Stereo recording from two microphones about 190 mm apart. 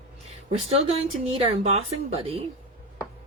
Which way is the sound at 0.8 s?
35° right (ahead or behind).